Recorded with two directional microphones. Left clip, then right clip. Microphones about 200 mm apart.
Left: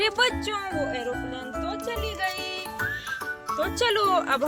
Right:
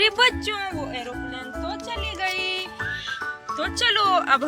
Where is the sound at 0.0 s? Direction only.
50° left (ahead or behind).